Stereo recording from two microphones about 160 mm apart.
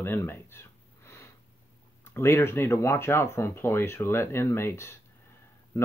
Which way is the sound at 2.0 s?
15° left (ahead or behind).